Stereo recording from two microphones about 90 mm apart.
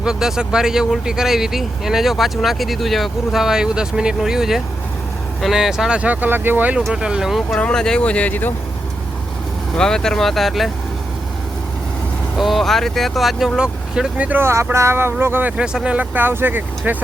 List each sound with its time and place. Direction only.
0.0 s speech: 5° right (ahead or behind)
6.9 s speech: 10° right (ahead or behind)
7.6 s speech: 10° left (ahead or behind)
9.7 s speech: 5° left (ahead or behind)
12.4 s speech: centre (ahead or behind)
14.3 s speech: 25° right (ahead or behind)
15.5 s speech: 10° right (ahead or behind)